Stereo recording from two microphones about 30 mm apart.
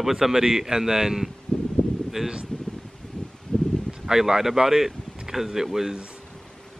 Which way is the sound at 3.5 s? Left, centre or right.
Left.